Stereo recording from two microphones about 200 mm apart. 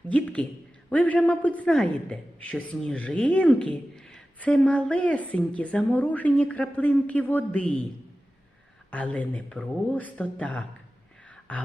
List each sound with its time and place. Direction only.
0.1 s a man's voice: 5° left (ahead or behind)
8.9 s a man's voice: 5° left (ahead or behind)
11.3 s a sound: 5° left (ahead or behind)